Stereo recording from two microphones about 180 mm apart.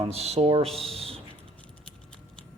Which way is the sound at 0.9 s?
30° right (ahead or behind).